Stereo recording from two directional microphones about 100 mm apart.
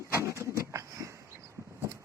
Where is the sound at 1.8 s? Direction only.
30° right (ahead or behind).